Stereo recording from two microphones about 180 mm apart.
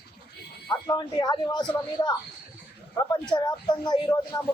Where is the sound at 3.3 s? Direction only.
25° left (ahead or behind).